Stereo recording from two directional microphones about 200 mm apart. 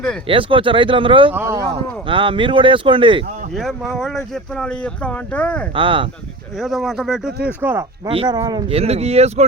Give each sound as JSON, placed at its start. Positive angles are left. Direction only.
{"t": 0.3, "sound": "speech", "side_deg": -25}
{"t": 1.3, "sound": "speech", "side_deg": -10}
{"t": 1.7, "sound": "speech", "side_deg": -25}
{"t": 3.6, "sound": "speech", "side_deg": 0}
{"t": 5.7, "sound": "speech", "side_deg": -25}
{"t": 6.6, "sound": "speech", "side_deg": 0}
{"t": 8.0, "sound": "speech", "side_deg": -25}